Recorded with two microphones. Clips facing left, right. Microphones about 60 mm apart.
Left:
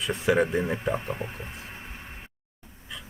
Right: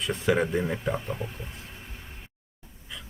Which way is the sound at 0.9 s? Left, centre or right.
Left.